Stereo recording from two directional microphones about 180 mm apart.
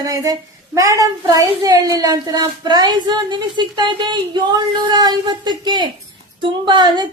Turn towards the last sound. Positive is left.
turn(degrees=-25)  # may be behind; listen again after turning